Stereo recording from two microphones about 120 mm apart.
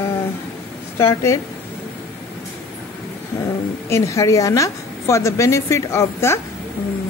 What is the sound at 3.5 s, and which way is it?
A woman's voice, 25° left (ahead or behind).